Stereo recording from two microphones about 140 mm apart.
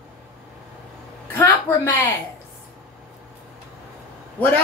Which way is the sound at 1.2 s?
15° left (ahead or behind).